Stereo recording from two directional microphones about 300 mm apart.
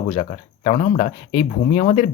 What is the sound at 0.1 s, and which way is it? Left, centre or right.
Speech, centre.